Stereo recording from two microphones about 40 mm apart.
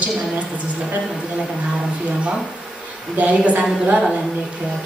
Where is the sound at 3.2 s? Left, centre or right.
Right.